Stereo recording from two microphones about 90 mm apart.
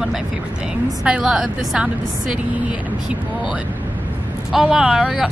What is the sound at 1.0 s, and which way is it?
Speech, 10° right (ahead or behind).